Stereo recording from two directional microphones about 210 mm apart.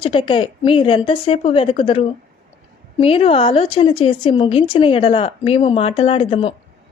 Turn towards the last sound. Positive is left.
turn(degrees=25)  # may be behind; listen again after turning